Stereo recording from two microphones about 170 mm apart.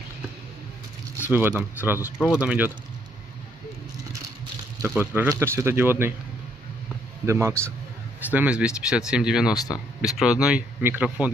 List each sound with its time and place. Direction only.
1.2 s speech: 10° right (ahead or behind)
4.8 s speech: 10° right (ahead or behind)
7.2 s speech: 15° right (ahead or behind)
9.6 s speech: 20° left (ahead or behind)
10.1 s speech: 5° right (ahead or behind)